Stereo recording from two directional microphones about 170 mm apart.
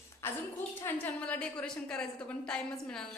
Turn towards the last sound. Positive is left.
turn(degrees=5)  # may be behind; listen again after turning